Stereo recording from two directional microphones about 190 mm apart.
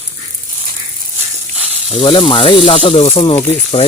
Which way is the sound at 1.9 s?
30° left (ahead or behind).